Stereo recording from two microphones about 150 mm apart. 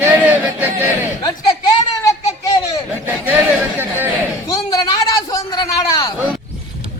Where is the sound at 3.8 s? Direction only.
15° right (ahead or behind).